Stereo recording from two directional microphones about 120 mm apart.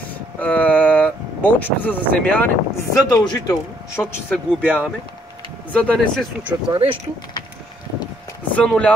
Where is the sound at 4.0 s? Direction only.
15° left (ahead or behind).